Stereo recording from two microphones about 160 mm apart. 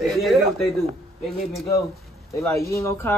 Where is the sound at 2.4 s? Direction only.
20° left (ahead or behind).